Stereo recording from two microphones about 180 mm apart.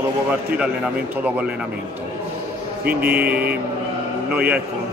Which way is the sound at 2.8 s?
60° right (ahead or behind).